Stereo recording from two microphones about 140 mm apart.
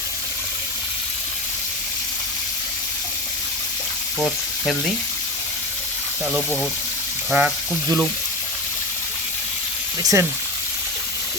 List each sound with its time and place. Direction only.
4.2 s speech: 5° left (ahead or behind)
7.3 s speech: 5° right (ahead or behind)
10.0 s speech: 25° right (ahead or behind)